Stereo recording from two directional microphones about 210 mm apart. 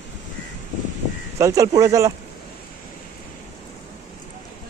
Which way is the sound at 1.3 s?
15° right (ahead or behind).